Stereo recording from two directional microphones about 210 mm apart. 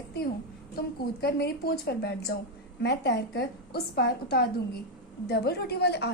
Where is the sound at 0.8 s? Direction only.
50° left (ahead or behind).